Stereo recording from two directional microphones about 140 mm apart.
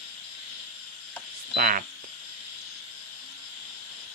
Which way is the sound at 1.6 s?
80° right.